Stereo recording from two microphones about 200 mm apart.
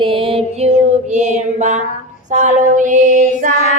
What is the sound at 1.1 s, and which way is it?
Mantra, 35° right (ahead or behind).